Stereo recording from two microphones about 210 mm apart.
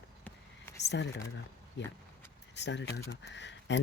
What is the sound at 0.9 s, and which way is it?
Speech, 55° left (ahead or behind).